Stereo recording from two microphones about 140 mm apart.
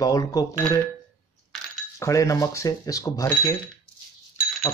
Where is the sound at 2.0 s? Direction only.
20° left (ahead or behind).